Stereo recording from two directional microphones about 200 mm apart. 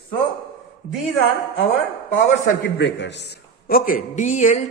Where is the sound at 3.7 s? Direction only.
45° left (ahead or behind).